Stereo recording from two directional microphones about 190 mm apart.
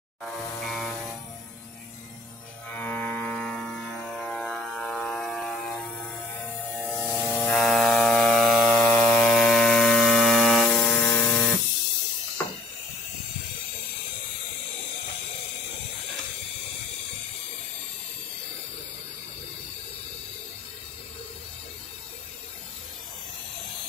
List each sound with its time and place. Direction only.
0.2 s music: centre (ahead or behind)
2.7 s music: 10° left (ahead or behind)
6.7 s electric shaver: 5° left (ahead or behind)